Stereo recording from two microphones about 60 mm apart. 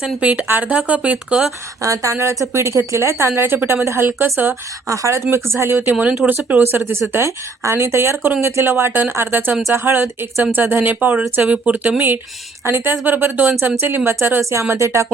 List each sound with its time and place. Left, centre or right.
0.0 s speech: right
0.4 s speech: right
0.7 s speech: right
1.8 s a woman's voice: right
4.9 s speech: right
5.9 s speech: right
6.7 s speech: right